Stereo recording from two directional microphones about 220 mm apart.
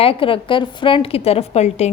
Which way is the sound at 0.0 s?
25° left (ahead or behind).